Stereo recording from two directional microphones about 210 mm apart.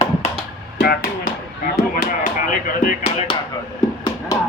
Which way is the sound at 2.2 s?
40° left (ahead or behind).